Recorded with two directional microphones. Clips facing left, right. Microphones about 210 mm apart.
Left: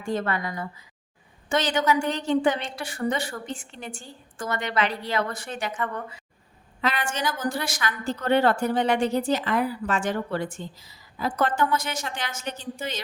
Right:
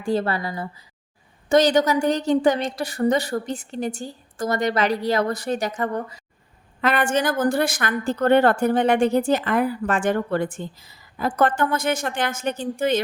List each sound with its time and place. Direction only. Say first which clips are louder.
0.0 s a woman's voice: right 4 dB; 35° right (ahead or behind)
6.8 s a woman's voice: right 7 dB; 55° right (ahead or behind)